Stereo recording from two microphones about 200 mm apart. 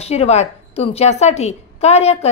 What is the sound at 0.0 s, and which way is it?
A woman's voice, 30° left (ahead or behind).